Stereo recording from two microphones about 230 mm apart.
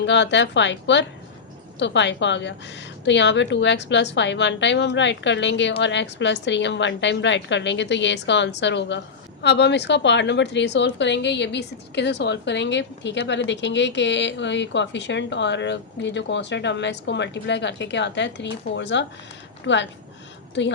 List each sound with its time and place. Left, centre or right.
0.0 s a woman's voice: left